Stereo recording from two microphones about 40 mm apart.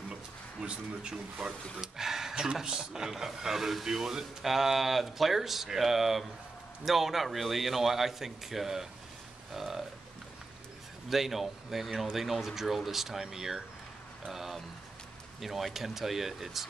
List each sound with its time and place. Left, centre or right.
0.1 s speech: right; by 9.8 s centre
11.1 s speech: centre